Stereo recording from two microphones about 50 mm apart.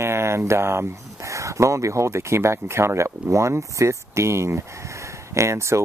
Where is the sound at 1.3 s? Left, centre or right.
Right.